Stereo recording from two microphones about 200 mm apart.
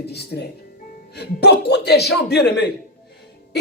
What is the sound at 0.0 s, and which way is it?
Speech, 55° left (ahead or behind).